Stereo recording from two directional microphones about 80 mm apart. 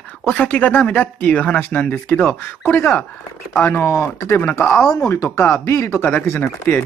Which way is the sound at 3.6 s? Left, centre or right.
Left.